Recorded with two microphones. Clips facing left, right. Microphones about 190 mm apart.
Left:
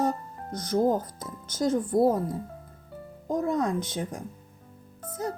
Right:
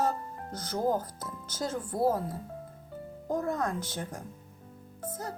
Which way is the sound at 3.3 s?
20° left (ahead or behind).